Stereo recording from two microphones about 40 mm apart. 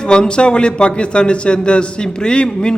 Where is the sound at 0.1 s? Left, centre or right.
Left.